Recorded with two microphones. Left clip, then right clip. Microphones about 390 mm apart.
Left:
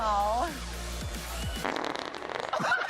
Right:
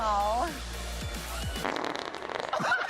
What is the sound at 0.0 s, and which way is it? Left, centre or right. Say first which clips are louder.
Music: even; centre.